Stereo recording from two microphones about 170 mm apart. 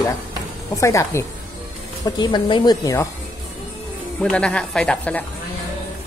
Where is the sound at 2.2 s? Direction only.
25° left (ahead or behind).